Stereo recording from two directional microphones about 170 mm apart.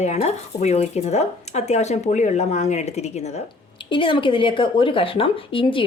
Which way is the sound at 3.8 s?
30° left (ahead or behind).